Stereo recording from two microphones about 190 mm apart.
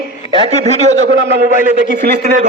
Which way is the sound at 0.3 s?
35° right (ahead or behind).